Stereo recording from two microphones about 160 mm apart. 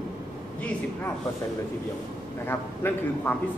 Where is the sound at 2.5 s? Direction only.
10° left (ahead or behind).